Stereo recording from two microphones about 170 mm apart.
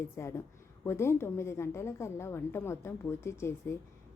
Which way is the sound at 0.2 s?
15° left (ahead or behind).